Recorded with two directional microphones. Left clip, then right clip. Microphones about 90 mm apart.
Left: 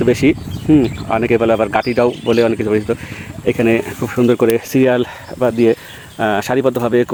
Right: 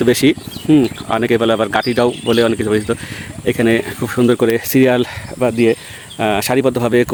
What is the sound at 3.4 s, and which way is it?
Speech, 20° right (ahead or behind).